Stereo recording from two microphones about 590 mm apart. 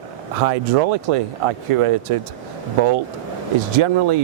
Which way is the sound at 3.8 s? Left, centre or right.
Right.